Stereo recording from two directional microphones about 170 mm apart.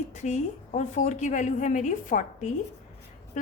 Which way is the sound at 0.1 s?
45° left (ahead or behind).